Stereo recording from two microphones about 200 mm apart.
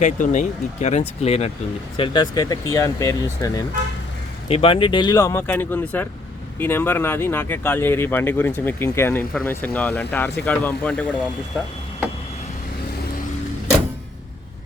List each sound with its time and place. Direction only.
0.0 s speech: 35° left (ahead or behind)
2.0 s speech: 20° left (ahead or behind)
4.4 s speech: 30° left (ahead or behind); by 11.0 s 5° left (ahead or behind)